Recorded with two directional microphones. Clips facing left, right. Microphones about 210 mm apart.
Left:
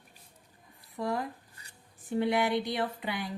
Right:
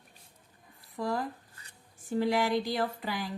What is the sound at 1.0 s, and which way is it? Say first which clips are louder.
Speech: even; 30° right (ahead or behind).